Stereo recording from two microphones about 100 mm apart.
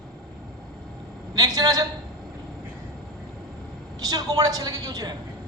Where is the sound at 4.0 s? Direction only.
40° right (ahead or behind).